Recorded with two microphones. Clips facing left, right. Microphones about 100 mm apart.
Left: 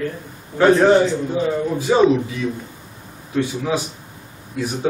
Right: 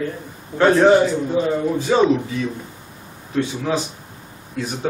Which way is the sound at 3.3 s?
5° left (ahead or behind).